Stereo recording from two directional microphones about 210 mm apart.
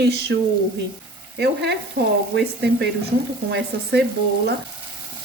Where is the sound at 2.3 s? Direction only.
50° right (ahead or behind).